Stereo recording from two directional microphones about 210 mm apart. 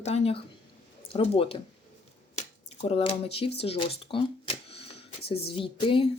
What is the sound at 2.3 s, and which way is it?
Finger snapping, 30° left (ahead or behind).